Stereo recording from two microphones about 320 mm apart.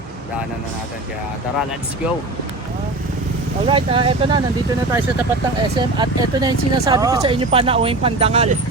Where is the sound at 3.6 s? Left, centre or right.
Centre.